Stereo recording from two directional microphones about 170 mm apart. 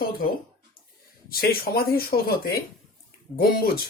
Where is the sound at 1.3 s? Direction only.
60° left (ahead or behind).